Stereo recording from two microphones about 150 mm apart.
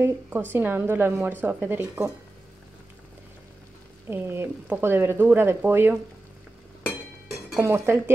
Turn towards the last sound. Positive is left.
turn(degrees=-15)  # may be behind; listen again after turning